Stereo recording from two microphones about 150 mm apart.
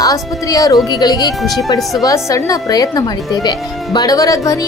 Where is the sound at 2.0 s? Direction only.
20° left (ahead or behind).